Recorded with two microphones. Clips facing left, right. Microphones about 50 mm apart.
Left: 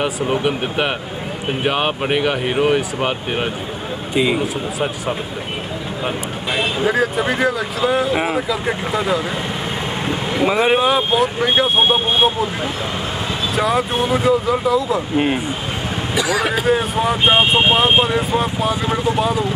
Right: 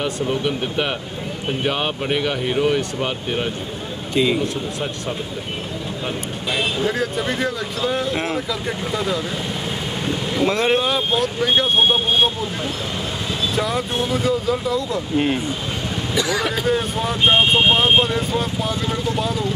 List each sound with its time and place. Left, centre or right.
0.0 s speech: left
4.1 s speech: centre
6.0 s speech: centre
13.6 s speech: centre